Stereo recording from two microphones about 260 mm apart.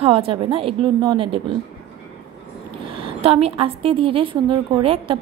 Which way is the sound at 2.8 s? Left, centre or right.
Right.